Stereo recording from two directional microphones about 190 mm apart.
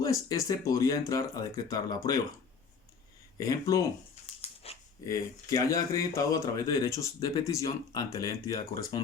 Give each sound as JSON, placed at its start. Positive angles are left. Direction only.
{"t": 0.0, "sound": "speech", "side_deg": 15}
{"t": 3.3, "sound": "speech", "side_deg": 20}
{"t": 4.4, "sound": "dog", "side_deg": 30}
{"t": 5.0, "sound": "speech", "side_deg": 15}